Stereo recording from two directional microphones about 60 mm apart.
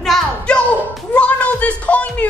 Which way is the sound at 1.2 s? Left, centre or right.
Left.